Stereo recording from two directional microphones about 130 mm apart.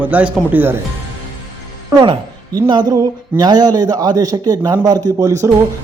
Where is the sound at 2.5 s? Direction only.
35° right (ahead or behind).